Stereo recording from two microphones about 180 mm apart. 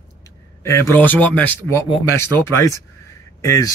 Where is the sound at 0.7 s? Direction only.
15° left (ahead or behind).